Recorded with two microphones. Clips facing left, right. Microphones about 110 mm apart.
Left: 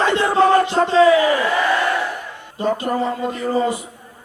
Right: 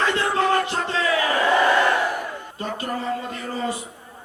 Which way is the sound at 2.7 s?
25° left (ahead or behind).